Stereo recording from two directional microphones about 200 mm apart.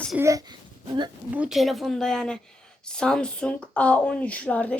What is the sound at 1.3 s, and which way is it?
A woman's voice, 5° right (ahead or behind).